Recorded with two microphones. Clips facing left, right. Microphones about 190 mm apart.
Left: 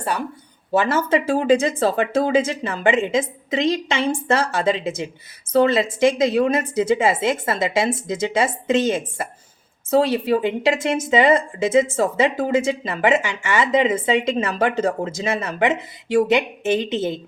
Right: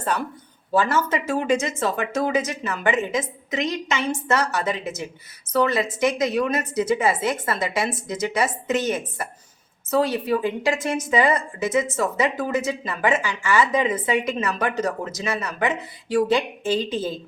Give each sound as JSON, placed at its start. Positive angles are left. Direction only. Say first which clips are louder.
{"t": 0.0, "sound": "speech", "louder": "left 1 dB", "side_deg": 10}
{"t": 0.7, "sound": "a woman's voice", "louder": "left 3 dB", "side_deg": 25}